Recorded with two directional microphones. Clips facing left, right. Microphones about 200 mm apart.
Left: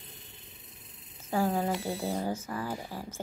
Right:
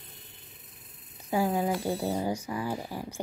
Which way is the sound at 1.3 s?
10° right (ahead or behind).